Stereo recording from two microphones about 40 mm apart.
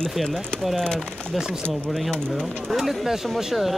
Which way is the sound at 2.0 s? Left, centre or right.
Centre.